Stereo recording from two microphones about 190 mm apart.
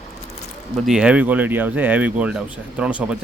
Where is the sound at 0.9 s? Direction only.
5° right (ahead or behind).